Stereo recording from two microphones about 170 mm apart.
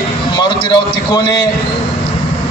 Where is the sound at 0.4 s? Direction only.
25° left (ahead or behind).